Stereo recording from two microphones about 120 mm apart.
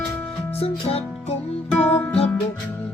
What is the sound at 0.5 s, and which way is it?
Music, 55° left (ahead or behind).